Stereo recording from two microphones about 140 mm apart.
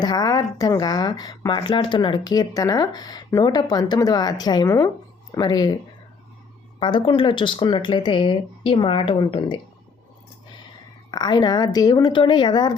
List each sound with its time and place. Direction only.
0.0 s speech: 30° left (ahead or behind)
6.7 s speech: 35° left (ahead or behind)
11.1 s speech: 30° left (ahead or behind)